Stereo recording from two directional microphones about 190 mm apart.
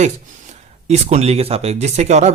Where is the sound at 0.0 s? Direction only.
35° right (ahead or behind).